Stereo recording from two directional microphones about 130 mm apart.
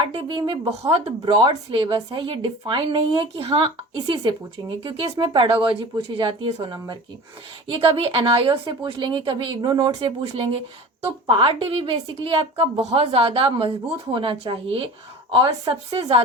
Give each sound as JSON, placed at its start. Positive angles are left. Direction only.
{"t": 0.0, "sound": "a woman's voice", "side_deg": -40}
{"t": 0.7, "sound": "a woman's voice", "side_deg": -50}